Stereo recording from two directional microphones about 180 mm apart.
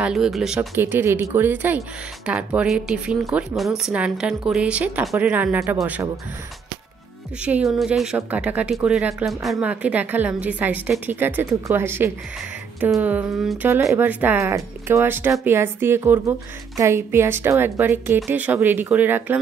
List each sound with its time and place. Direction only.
0.0 s a woman's voice: 5° right (ahead or behind)
7.4 s a woman's voice: 5° right (ahead or behind)